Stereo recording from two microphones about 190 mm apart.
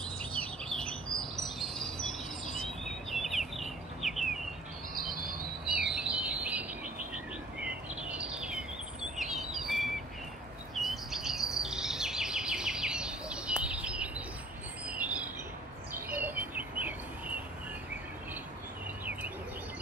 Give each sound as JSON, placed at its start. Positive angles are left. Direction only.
{"t": 0.4, "sound": "bird", "side_deg": 5}
{"t": 4.9, "sound": "a sound", "side_deg": -50}
{"t": 5.7, "sound": "chirp", "side_deg": -5}
{"t": 7.6, "sound": "a sound", "side_deg": -5}
{"t": 9.1, "sound": "bird", "side_deg": 0}
{"t": 10.7, "sound": "bird vocalization", "side_deg": 0}
{"t": 14.9, "sound": "train", "side_deg": -5}
{"t": 15.9, "sound": "bird", "side_deg": -10}